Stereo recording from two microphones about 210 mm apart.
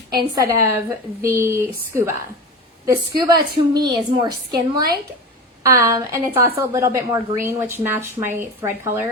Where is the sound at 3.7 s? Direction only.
20° right (ahead or behind).